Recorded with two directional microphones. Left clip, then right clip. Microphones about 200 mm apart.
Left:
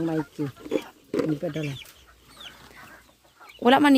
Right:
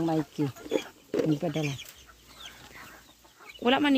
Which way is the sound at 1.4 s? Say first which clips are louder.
Left 1 dB; 30° right (ahead or behind).